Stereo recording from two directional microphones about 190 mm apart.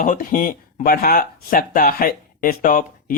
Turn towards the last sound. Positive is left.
turn(degrees=45)  # may be behind; listen again after turning